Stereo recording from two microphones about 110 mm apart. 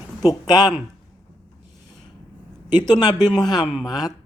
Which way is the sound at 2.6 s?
40° left (ahead or behind).